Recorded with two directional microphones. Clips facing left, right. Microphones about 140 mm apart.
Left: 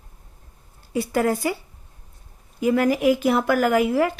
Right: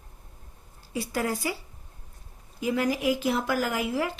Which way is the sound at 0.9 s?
55° left (ahead or behind).